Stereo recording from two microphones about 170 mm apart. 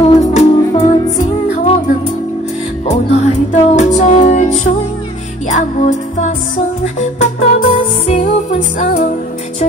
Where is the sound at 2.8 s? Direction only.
45° left (ahead or behind).